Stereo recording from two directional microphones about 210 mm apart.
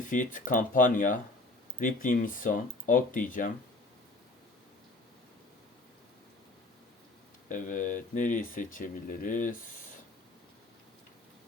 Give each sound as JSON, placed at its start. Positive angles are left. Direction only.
{"t": 0.1, "sound": "speech", "side_deg": 40}
{"t": 7.4, "sound": "speech", "side_deg": 40}